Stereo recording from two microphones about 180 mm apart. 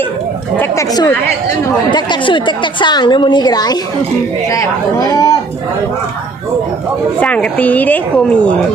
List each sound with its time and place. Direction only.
0.5 s a woman's voice: 15° left (ahead or behind)
7.2 s speech: 5° left (ahead or behind)